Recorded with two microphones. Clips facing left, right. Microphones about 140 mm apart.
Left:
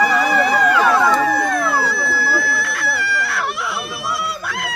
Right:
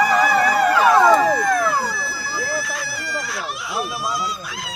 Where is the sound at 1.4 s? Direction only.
60° left (ahead or behind).